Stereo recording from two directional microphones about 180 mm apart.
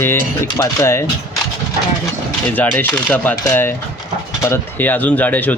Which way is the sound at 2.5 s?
10° left (ahead or behind).